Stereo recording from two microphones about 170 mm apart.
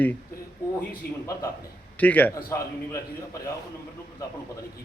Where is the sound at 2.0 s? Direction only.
10° left (ahead or behind).